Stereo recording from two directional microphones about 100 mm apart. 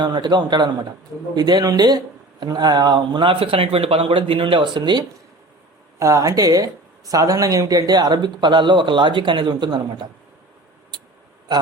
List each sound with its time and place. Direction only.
0.0 s a man's voice: 45° right (ahead or behind)
6.0 s speech: 30° right (ahead or behind); by 10.1 s 45° right (ahead or behind)
10.9 s a sound: 50° right (ahead or behind)
11.5 s speech: 45° right (ahead or behind)